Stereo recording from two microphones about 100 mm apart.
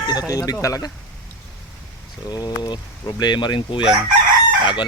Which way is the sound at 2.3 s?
45° left (ahead or behind).